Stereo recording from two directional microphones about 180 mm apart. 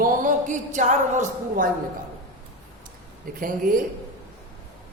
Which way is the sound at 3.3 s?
50° right (ahead or behind).